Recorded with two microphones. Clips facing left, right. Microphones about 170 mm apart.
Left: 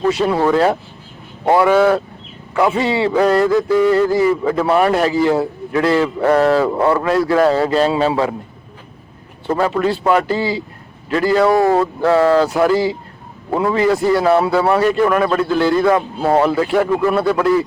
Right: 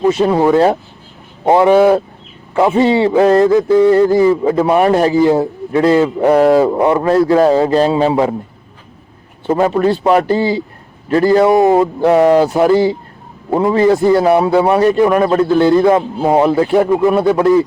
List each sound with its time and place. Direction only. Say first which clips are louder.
0.0 s a man's voice: right 4 dB; 20° right (ahead or behind)
9.5 s a man's voice: right 4 dB; 20° right (ahead or behind)